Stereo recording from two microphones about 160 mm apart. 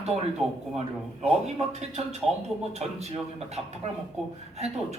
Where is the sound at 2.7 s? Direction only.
40° right (ahead or behind).